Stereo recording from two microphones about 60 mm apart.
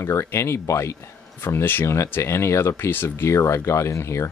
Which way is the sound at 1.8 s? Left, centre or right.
Left.